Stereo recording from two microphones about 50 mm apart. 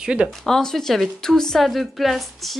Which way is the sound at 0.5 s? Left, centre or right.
Centre.